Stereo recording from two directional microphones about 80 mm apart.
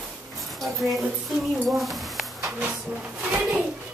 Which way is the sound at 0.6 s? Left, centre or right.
Centre.